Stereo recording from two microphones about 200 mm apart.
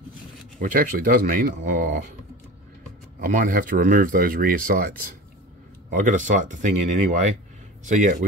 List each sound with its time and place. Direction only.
0.6 s speech: 45° right (ahead or behind)
3.2 s speech: 45° right (ahead or behind)